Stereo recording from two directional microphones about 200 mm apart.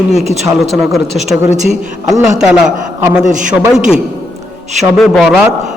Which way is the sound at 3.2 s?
40° right (ahead or behind).